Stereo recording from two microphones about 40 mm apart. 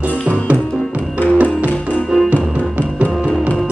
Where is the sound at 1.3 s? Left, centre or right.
Right.